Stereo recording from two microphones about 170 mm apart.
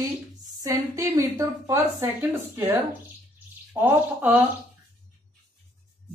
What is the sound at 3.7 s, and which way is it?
Speech, 10° right (ahead or behind).